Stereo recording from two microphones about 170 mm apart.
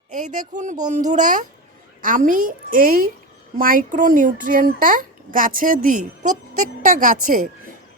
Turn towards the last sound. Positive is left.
turn(degrees=-55)  # may be behind; listen again after turning